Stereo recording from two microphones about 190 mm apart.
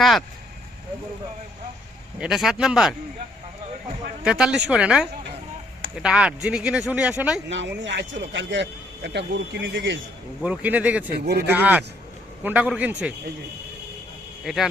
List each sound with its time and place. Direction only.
0.0 s speech: centre (ahead or behind)
2.1 s speech: 5° right (ahead or behind)
4.2 s speech: 5° right (ahead or behind)
7.8 s speech: 70° right (ahead or behind)
10.4 s a man's voice: 5° right (ahead or behind)
11.3 s speech: 55° right (ahead or behind)
11.5 s a man's voice: 10° right (ahead or behind)
14.4 s speech: centre (ahead or behind)